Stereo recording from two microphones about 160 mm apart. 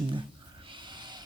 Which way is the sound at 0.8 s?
30° right (ahead or behind).